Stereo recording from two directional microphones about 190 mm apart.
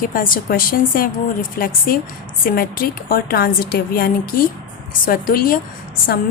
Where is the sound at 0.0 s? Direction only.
50° left (ahead or behind).